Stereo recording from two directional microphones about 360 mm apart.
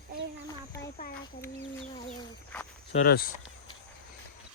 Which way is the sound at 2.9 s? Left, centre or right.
Left.